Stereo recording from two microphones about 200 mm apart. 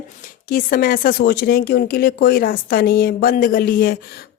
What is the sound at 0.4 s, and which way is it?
Speech, 45° left (ahead or behind).